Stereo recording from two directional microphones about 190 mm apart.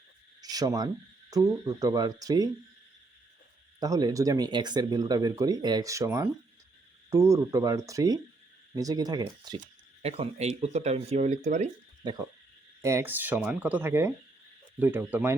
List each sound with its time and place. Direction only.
0.5 s speech: 20° right (ahead or behind)
3.8 s speech: 20° right (ahead or behind)
10.0 s speech: 35° right (ahead or behind)
12.0 s speech: 20° right (ahead or behind)